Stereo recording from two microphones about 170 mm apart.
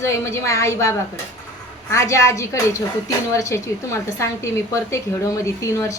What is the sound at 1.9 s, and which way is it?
A woman's voice, 15° left (ahead or behind).